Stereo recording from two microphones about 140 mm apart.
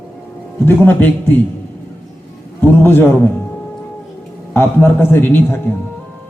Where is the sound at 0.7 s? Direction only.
15° left (ahead or behind).